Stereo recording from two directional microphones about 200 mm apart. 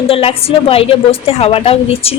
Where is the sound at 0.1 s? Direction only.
30° left (ahead or behind).